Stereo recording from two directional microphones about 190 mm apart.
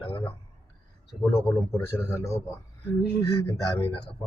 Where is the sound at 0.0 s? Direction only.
30° left (ahead or behind).